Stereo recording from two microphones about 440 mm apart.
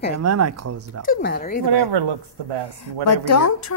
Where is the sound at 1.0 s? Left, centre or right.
Centre.